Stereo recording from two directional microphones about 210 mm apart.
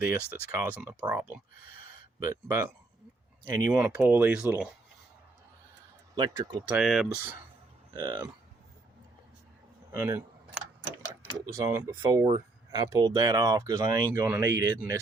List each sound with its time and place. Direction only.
0.0 s speech: 10° right (ahead or behind)
6.1 s speech: 20° right (ahead or behind); by 7.3 s centre (ahead or behind)
7.9 s speech: 20° right (ahead or behind)
9.9 s speech: 10° right (ahead or behind)